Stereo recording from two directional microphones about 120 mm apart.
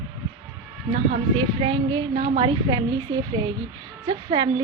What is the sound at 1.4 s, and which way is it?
A woman's voice, 45° right (ahead or behind).